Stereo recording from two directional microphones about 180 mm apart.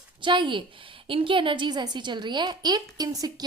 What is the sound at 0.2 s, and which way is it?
A woman's voice, 25° right (ahead or behind).